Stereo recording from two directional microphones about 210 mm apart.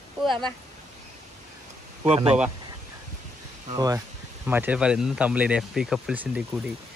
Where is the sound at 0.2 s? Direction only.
Centre (ahead or behind).